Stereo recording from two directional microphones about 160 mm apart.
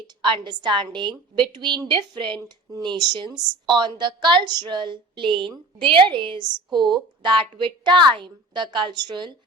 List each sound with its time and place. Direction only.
0.2 s a woman's voice: 30° right (ahead or behind)